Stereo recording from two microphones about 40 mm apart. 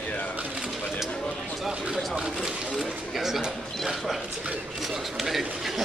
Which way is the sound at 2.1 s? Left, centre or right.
Right.